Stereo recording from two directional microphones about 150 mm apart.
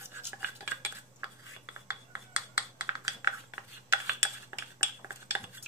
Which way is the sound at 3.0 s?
20° right (ahead or behind).